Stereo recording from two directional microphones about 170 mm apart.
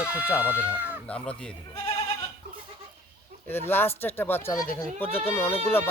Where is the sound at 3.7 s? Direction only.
15° left (ahead or behind).